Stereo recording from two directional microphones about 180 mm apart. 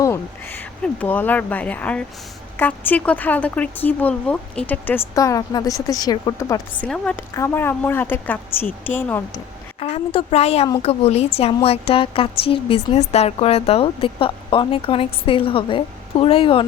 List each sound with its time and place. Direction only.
0.0 s speech: 15° left (ahead or behind)
6.8 s a woman's voice: 5° left (ahead or behind)
9.8 s a woman's voice: 30° left (ahead or behind)